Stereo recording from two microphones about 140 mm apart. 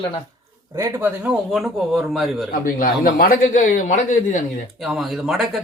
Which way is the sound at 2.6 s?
90° left.